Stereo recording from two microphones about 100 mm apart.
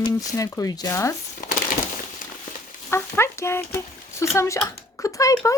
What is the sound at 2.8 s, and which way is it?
Speech, 25° left (ahead or behind).